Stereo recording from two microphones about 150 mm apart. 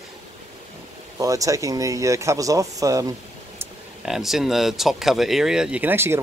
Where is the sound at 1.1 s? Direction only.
20° right (ahead or behind).